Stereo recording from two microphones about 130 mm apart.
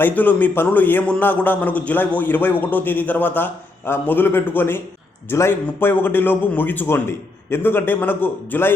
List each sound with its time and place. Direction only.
0.0 s a man's voice: 15° left (ahead or behind)